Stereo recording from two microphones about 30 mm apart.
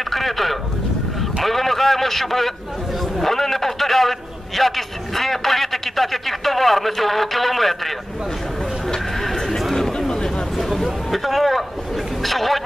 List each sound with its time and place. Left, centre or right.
0.1 s a man's voice: centre
9.8 s chatter: centre
10.6 s a sound: centre
12.2 s speech: centre